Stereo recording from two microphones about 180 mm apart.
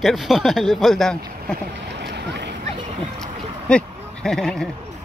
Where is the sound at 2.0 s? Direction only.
70° right (ahead or behind).